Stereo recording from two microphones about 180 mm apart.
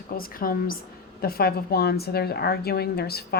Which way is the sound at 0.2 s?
55° left (ahead or behind).